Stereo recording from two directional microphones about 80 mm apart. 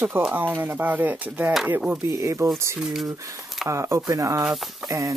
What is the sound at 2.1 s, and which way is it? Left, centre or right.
Speech, right.